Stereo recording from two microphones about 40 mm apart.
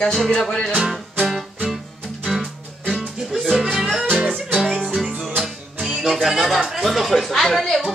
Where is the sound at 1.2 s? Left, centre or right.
Centre.